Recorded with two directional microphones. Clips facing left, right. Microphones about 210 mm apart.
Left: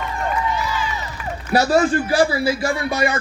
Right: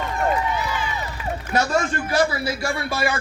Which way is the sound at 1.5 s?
35° left (ahead or behind).